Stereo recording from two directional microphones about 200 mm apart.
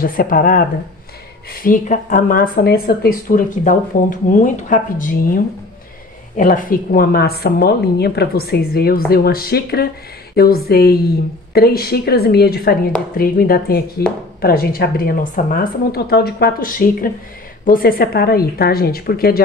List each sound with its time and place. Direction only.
0.0 s speech: 45° left (ahead or behind)